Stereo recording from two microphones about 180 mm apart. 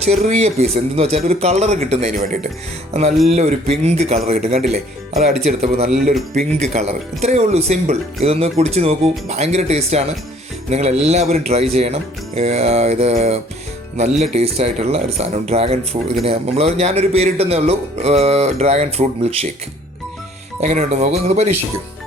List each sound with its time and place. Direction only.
0.0 s speech: 35° right (ahead or behind)
20.6 s speech: 40° right (ahead or behind)